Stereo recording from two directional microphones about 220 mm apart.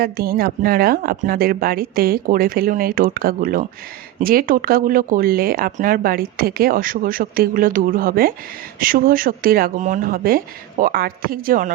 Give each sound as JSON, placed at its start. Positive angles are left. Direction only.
{"t": 0.0, "sound": "speech", "side_deg": -45}